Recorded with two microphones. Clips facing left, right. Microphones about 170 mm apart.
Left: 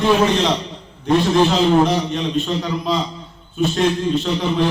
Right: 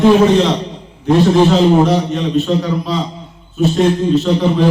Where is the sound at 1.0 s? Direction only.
Centre (ahead or behind).